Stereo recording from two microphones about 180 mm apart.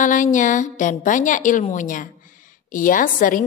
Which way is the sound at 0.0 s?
45° left (ahead or behind).